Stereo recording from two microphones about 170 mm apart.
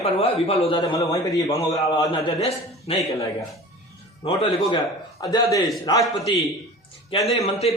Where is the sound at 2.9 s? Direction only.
35° left (ahead or behind).